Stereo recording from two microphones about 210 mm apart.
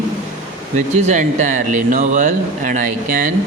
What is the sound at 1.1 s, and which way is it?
Speech, 35° right (ahead or behind).